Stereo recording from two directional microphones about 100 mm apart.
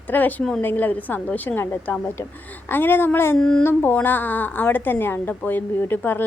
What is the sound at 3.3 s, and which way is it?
Speech, 10° left (ahead or behind).